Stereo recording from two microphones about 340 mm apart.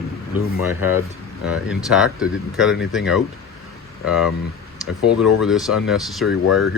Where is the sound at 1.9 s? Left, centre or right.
Centre.